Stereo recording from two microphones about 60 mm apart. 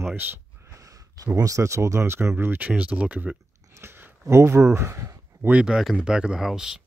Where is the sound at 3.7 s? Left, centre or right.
Right.